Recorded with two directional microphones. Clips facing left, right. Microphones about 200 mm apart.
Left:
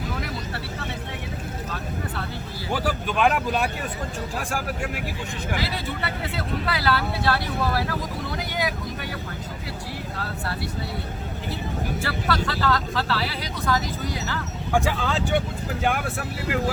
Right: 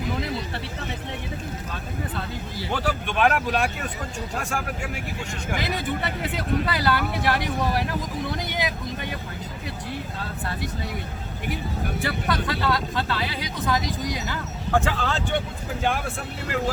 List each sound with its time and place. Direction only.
2.7 s speech: 5° left (ahead or behind)
4.4 s speech: centre (ahead or behind)
5.5 s speech: 15° right (ahead or behind)
12.5 s speech: 20° right (ahead or behind)
14.7 s speech: 10° left (ahead or behind)